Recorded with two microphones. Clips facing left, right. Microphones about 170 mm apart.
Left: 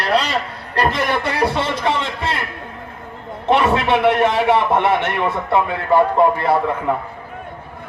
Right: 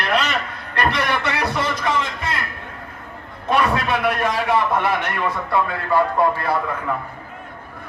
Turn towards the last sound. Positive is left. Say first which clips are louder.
# left 5 dB
turn(degrees=25)  # may be behind; listen again after turning